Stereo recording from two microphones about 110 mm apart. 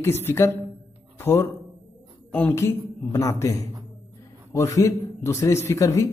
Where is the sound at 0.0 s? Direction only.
20° left (ahead or behind).